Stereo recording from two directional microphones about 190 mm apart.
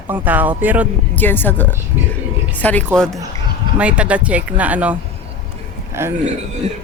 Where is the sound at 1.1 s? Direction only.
10° left (ahead or behind); by 6.1 s 15° right (ahead or behind).